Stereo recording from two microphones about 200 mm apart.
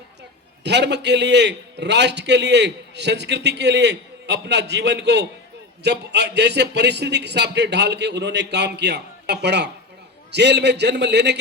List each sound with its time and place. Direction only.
0.6 s a man's voice: 60° right (ahead or behind)